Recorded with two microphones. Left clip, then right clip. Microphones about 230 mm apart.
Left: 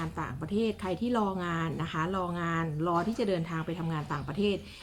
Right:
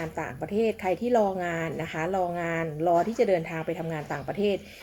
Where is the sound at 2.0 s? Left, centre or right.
Left.